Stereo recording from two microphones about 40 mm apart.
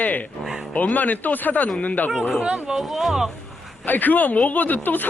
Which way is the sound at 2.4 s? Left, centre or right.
Right.